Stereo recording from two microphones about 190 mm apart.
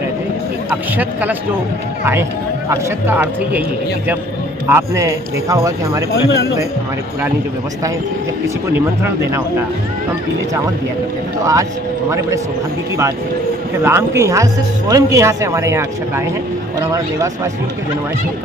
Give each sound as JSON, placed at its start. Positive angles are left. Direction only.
{"t": 0.7, "sound": "speech", "side_deg": -10}
{"t": 2.7, "sound": "speech", "side_deg": -10}
{"t": 4.6, "sound": "speech", "side_deg": -15}
{"t": 6.2, "sound": "speech", "side_deg": 70}
{"t": 8.7, "sound": "speech", "side_deg": -10}
{"t": 13.8, "sound": "speech", "side_deg": -15}